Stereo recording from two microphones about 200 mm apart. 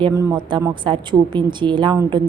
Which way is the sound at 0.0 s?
20° right (ahead or behind).